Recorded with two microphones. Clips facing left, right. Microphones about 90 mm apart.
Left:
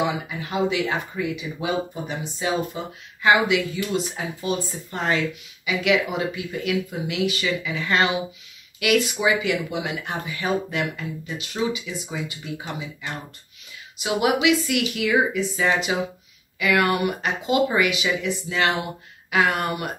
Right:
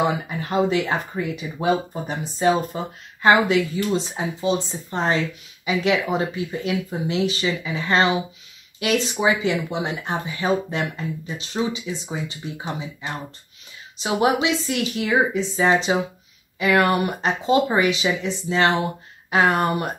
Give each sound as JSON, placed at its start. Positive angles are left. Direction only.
{"t": 0.0, "sound": "speech", "side_deg": -40}